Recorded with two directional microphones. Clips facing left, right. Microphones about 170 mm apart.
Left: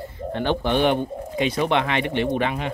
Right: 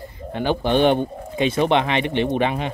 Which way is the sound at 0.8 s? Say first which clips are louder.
Right 3 dB; 25° right (ahead or behind).